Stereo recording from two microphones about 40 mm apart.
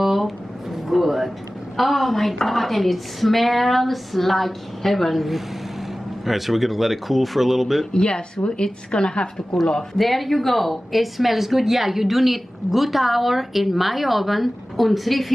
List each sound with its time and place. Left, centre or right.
0.0 s a sound: centre
1.8 s speech: centre
7.9 s a woman's voice: left
9.9 s speech: centre